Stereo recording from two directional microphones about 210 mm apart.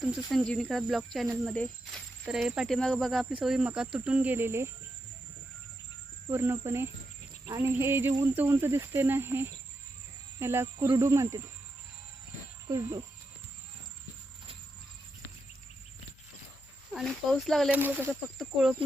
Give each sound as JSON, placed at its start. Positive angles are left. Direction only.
{"t": 0.0, "sound": "speech", "side_deg": 0}
{"t": 6.2, "sound": "speech", "side_deg": -10}
{"t": 12.6, "sound": "speech", "side_deg": -15}
{"t": 16.9, "sound": "speech", "side_deg": 0}